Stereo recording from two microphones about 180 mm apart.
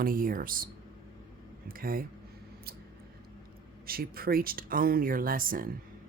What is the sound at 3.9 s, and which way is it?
Speech, 55° right (ahead or behind).